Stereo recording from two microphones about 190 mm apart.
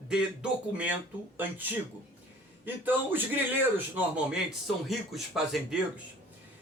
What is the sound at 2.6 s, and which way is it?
Speech, 10° right (ahead or behind).